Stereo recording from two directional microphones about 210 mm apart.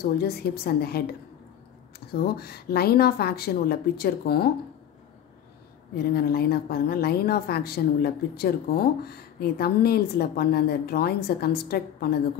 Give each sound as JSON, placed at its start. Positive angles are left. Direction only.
{"t": 0.0, "sound": "a woman's voice", "side_deg": 50}
{"t": 2.1, "sound": "a woman's voice", "side_deg": 50}
{"t": 6.1, "sound": "a woman's voice", "side_deg": 45}